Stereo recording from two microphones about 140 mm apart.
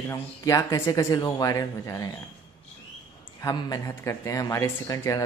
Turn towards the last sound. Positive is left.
turn(degrees=25)  # may be behind; listen again after turning